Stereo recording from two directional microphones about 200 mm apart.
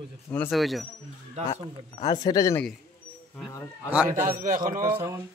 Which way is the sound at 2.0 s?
20° left (ahead or behind).